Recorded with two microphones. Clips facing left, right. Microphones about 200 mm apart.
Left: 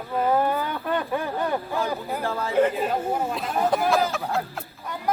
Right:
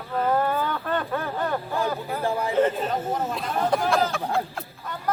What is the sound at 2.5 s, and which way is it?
Speech, 10° left (ahead or behind).